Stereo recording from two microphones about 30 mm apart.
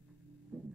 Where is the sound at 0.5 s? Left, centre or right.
Centre.